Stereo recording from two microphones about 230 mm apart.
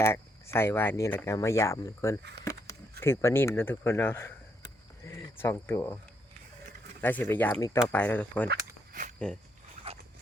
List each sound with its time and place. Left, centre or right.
0.0 s speech: centre
7.0 s speech: centre
8.9 s a sound: right
9.1 s speech: centre